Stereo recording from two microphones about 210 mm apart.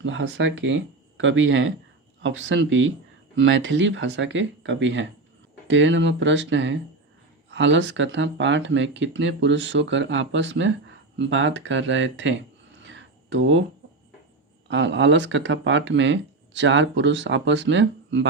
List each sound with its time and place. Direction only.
0.0 s speech: 65° right (ahead or behind)
12.8 s a sound: 60° right (ahead or behind)
14.7 s speech: 60° right (ahead or behind)